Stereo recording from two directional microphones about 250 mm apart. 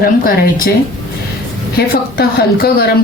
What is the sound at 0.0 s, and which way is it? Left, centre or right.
Speech, left.